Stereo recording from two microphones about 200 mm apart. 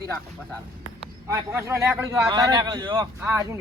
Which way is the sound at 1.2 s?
15° right (ahead or behind).